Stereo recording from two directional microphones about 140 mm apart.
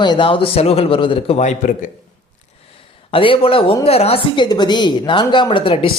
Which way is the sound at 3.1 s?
40° left (ahead or behind).